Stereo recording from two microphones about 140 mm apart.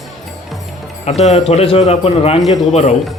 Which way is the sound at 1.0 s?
50° left (ahead or behind).